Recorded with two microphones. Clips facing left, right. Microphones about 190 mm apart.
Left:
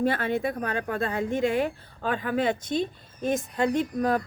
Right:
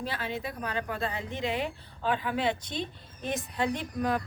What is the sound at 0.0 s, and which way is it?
A woman's voice, 55° left (ahead or behind).